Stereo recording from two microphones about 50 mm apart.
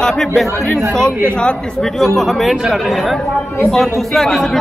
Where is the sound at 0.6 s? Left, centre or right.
Centre.